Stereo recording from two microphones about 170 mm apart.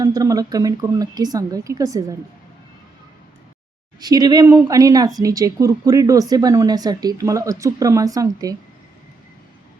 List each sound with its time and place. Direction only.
0.0 s a woman's voice: 20° right (ahead or behind)
4.0 s a woman's voice: 25° right (ahead or behind)